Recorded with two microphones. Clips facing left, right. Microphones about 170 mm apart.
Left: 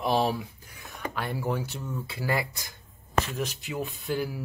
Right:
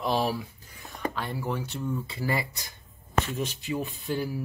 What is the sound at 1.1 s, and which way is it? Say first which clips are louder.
Speech: left 6 dB; 10° left (ahead or behind).